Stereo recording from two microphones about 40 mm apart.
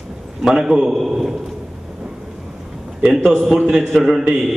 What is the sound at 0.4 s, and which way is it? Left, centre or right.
Speech, centre.